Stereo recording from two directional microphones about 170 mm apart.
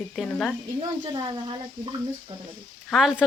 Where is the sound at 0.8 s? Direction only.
25° right (ahead or behind).